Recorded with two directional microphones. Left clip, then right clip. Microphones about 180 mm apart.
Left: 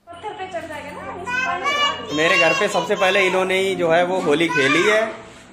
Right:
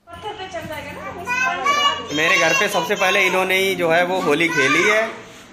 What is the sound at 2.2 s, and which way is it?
A man's voice, 15° left (ahead or behind).